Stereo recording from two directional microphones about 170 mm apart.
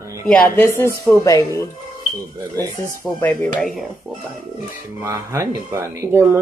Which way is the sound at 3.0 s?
10° left (ahead or behind).